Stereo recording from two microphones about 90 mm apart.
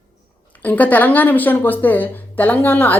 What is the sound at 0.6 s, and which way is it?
A woman's voice, 20° left (ahead or behind).